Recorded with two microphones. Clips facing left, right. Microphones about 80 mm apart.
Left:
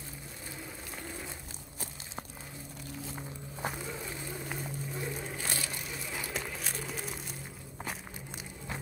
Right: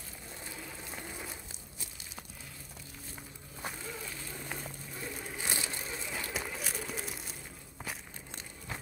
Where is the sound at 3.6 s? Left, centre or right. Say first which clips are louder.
Left 4 dB; centre.